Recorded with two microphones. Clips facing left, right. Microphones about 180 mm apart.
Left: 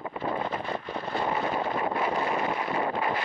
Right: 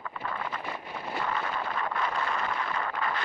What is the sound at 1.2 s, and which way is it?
Wind noise, 25° left (ahead or behind).